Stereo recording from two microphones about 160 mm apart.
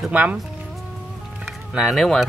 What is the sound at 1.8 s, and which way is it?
Speech, centre (ahead or behind).